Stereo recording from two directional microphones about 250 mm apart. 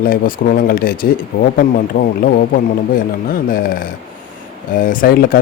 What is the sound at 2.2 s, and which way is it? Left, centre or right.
Speech, left.